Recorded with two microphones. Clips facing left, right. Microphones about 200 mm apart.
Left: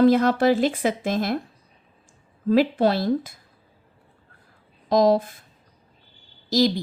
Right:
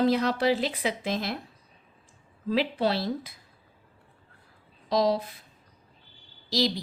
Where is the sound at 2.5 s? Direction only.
50° left (ahead or behind).